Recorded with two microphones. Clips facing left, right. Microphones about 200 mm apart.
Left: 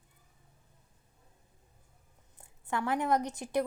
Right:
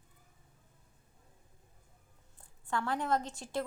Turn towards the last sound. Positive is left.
turn(degrees=20)  # may be behind; listen again after turning